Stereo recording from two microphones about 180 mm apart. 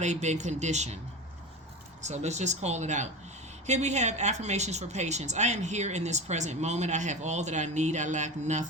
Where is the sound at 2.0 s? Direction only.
40° right (ahead or behind).